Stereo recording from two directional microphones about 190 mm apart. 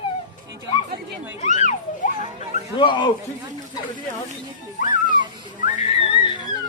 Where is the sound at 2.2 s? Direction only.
35° right (ahead or behind).